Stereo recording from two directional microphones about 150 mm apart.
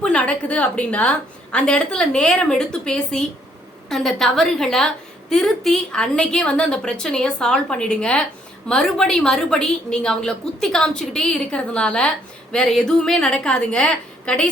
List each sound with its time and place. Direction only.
0.0 s a woman's voice: 10° left (ahead or behind)